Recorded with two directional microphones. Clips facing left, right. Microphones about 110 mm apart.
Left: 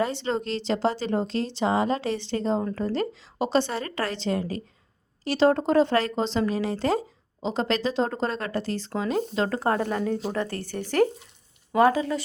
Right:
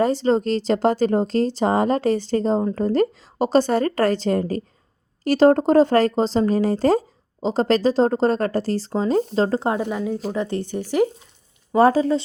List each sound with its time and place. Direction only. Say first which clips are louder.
0.0 s speech: right 8 dB; 40° right (ahead or behind)
9.7 s speech: right 2 dB; 10° right (ahead or behind)
10.3 s speech: right 5 dB; 20° right (ahead or behind)
11.7 s speech: right 5 dB; 30° right (ahead or behind)